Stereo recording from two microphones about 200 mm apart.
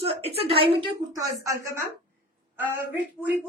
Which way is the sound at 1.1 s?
15° right (ahead or behind).